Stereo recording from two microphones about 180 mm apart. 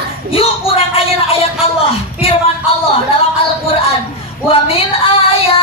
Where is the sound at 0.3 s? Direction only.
30° left (ahead or behind).